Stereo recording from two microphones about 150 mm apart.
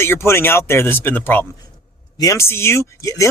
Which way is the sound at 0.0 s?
15° left (ahead or behind).